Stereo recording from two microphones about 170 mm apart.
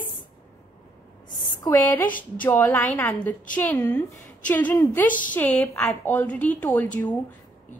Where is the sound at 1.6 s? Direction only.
10° left (ahead or behind).